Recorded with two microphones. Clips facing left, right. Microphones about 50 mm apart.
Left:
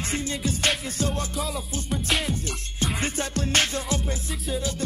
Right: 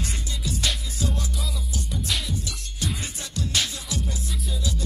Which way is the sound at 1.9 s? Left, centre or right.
Left.